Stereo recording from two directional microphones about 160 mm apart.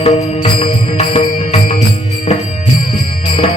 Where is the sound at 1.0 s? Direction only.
35° left (ahead or behind).